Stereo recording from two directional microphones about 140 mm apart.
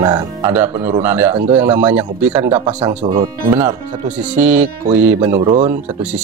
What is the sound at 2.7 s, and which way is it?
Speech, 35° right (ahead or behind).